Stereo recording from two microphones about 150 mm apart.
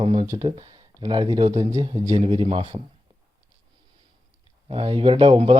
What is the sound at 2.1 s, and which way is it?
Speech, 40° right (ahead or behind).